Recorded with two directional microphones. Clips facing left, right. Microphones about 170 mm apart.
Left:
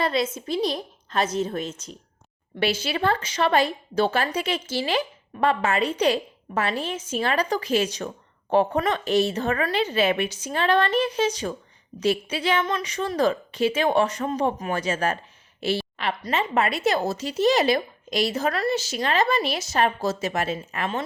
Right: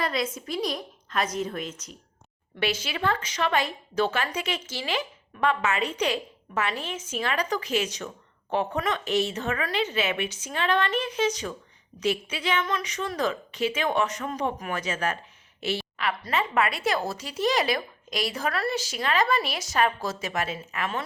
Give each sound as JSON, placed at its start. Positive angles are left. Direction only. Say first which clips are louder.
{"t": 0.0, "sound": "a woman's voice", "louder": "left 4 dB", "side_deg": 25}
{"t": 15.6, "sound": "a sound", "louder": "left 3 dB", "side_deg": 30}
{"t": 16.2, "sound": "speech", "louder": "left 2 dB", "side_deg": 25}